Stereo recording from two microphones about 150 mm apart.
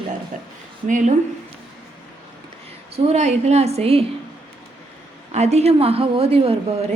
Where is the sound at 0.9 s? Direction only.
55° right (ahead or behind).